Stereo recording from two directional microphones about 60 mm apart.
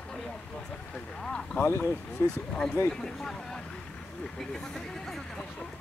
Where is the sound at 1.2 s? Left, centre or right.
Centre.